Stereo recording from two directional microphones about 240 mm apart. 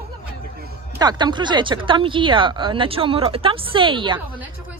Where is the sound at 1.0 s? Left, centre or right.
Centre.